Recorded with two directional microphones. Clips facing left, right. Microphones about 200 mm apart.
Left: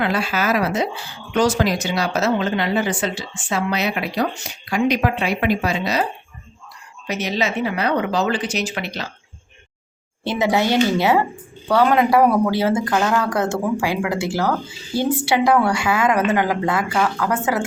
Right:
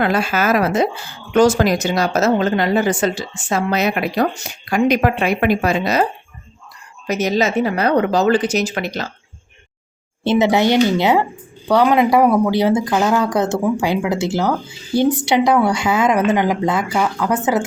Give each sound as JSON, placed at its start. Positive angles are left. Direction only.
{"t": 0.0, "sound": "a woman's voice", "side_deg": -45}
{"t": 7.1, "sound": "a woman's voice", "side_deg": -45}
{"t": 10.2, "sound": "speech", "side_deg": -20}